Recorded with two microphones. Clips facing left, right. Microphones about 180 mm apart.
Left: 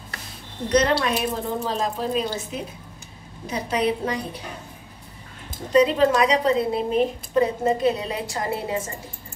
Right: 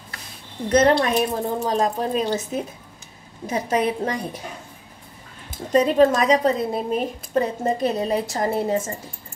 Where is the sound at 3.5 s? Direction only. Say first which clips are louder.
Right 2 dB; 45° right (ahead or behind).